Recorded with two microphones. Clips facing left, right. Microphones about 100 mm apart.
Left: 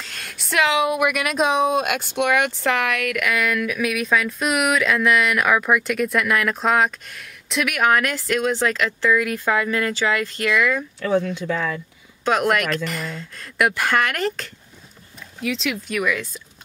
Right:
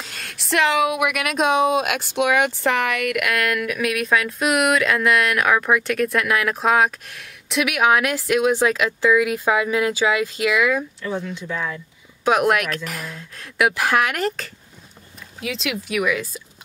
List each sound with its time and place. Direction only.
0.1 s speech: centre (ahead or behind)
11.0 s speech: 70° left (ahead or behind)
12.3 s speech: 5° right (ahead or behind)